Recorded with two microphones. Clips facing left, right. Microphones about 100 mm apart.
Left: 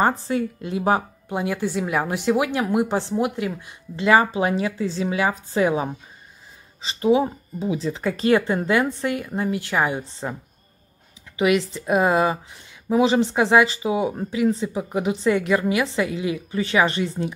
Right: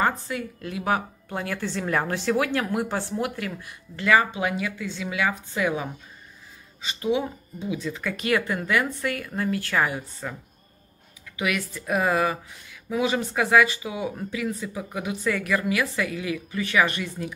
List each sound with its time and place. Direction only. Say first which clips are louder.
0.3 s a woman's voice: left 7 dB; 25° left (ahead or behind)
11.3 s a woman's voice: left 8 dB; 25° left (ahead or behind)